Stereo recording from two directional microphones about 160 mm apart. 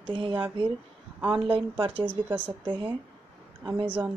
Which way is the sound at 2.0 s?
10° right (ahead or behind).